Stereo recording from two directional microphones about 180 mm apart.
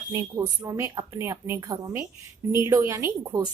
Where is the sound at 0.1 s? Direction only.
20° right (ahead or behind).